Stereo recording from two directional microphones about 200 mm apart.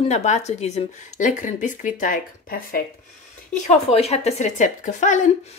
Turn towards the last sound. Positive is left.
turn(degrees=35)  # may be behind; listen again after turning